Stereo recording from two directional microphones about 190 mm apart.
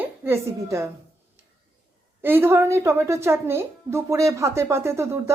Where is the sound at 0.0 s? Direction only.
15° right (ahead or behind).